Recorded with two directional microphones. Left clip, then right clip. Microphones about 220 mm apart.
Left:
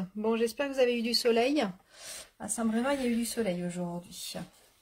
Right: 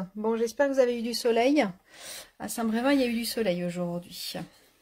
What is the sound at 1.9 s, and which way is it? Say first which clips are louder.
Speech: right 3 dB; 35° right (ahead or behind).